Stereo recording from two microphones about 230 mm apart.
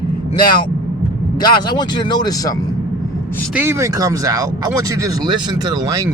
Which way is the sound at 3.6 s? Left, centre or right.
Centre.